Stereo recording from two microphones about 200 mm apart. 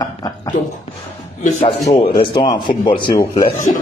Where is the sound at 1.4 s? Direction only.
35° left (ahead or behind).